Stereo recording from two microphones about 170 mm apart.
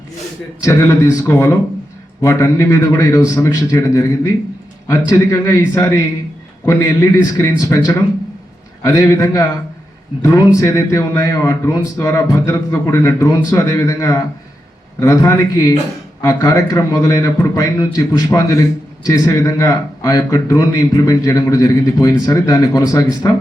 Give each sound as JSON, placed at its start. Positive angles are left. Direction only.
{"t": 0.6, "sound": "a man's voice", "side_deg": 20}
{"t": 8.8, "sound": "a man's voice", "side_deg": 20}